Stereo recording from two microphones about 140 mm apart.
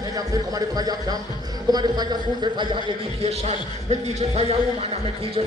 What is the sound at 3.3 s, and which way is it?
Speech, 50° right (ahead or behind).